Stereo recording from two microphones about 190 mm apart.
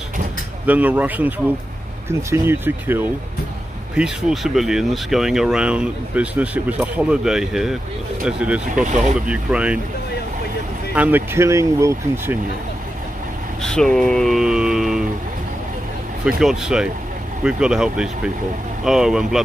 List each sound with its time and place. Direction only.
0.7 s speech: 10° right (ahead or behind)
8.7 s speech: 40° right (ahead or behind)
9.3 s speech: 5° right (ahead or behind)
11.0 s speech: 10° right (ahead or behind)
13.6 s a sound: 5° left (ahead or behind)
16.3 s speech: 5° right (ahead or behind)